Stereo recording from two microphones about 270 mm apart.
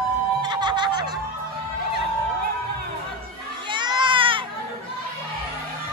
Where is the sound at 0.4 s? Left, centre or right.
Centre.